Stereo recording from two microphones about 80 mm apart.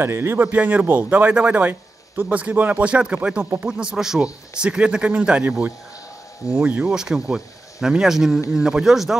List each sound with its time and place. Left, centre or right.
0.0 s a man's voice: right; by 9.2 s centre